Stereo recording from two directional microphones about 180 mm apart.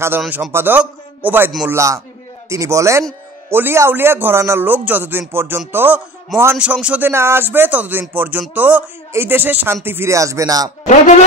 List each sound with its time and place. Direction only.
0.2 s speech: centre (ahead or behind)
0.5 s a man's voice: 10° right (ahead or behind)